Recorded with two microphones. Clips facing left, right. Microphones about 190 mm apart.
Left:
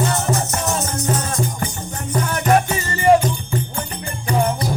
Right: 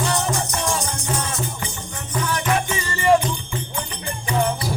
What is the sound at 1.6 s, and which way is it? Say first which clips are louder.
Music: left 5 dB; 45° left (ahead or behind).